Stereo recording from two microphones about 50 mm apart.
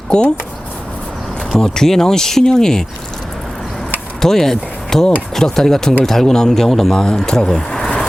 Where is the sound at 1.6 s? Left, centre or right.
Centre.